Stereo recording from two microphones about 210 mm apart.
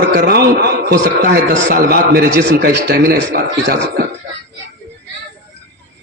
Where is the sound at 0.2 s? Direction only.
50° right (ahead or behind).